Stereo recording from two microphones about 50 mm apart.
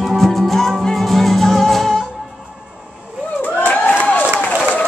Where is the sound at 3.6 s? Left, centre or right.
Left.